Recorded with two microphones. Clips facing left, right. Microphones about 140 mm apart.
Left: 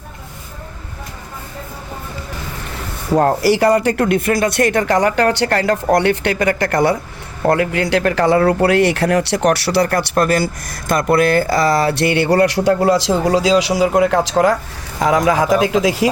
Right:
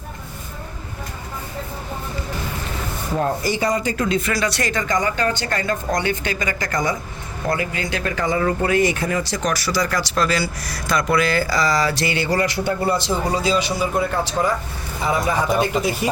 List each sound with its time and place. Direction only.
3.2 s speech: 75° left (ahead or behind); by 16.0 s 90° left